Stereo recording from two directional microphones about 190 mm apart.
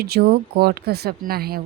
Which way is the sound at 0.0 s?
55° right (ahead or behind).